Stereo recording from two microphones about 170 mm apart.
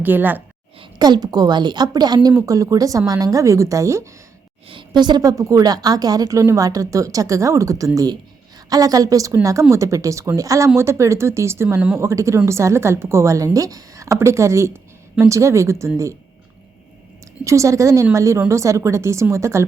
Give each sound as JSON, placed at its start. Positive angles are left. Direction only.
{"t": 0.0, "sound": "a woman's voice", "side_deg": -10}
{"t": 0.8, "sound": "a woman's voice", "side_deg": -25}
{"t": 4.7, "sound": "a woman's voice", "side_deg": -30}
{"t": 17.4, "sound": "a woman's voice", "side_deg": -20}